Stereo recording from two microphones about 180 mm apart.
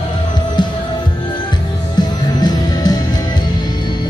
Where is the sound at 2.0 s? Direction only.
20° left (ahead or behind).